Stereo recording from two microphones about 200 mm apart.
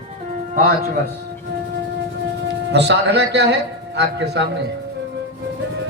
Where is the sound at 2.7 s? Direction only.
55° right (ahead or behind).